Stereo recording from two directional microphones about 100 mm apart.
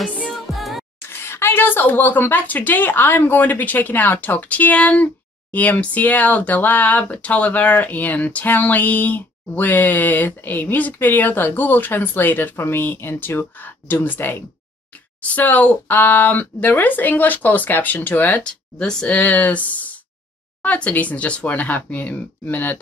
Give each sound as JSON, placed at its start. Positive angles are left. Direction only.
{"t": 0.0, "sound": "music", "side_deg": 15}
{"t": 0.6, "sound": "music", "side_deg": 0}
{"t": 1.0, "sound": "speech", "side_deg": 25}